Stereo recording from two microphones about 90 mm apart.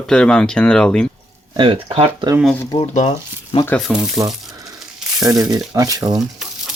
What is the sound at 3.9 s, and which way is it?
Speech, 5° right (ahead or behind).